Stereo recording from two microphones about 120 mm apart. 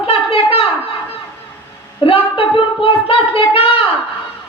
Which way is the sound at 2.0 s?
50° left (ahead or behind).